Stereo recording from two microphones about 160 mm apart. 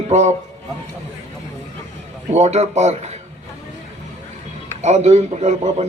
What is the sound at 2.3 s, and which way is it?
Speech, 45° right (ahead or behind).